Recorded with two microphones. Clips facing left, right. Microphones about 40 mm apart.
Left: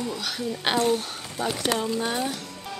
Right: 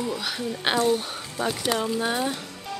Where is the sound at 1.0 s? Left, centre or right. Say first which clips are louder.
Right 1 dB; centre.